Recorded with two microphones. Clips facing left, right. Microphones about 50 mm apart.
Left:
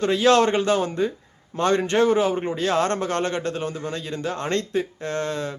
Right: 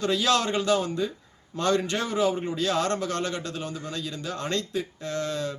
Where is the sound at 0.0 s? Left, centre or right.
Left.